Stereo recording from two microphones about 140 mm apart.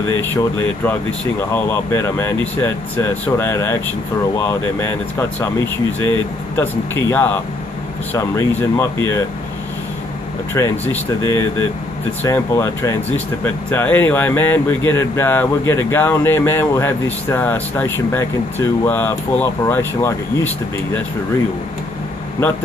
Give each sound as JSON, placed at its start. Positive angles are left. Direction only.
{"t": 0.2, "sound": "speech", "side_deg": 15}
{"t": 6.5, "sound": "speech", "side_deg": 15}
{"t": 10.5, "sound": "speech", "side_deg": 20}